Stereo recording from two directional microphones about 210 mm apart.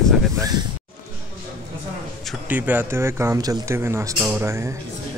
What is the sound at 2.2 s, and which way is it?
Speech, 5° right (ahead or behind).